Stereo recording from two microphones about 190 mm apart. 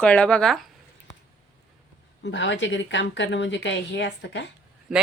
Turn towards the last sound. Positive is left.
turn(degrees=0)  # may be behind; listen again after turning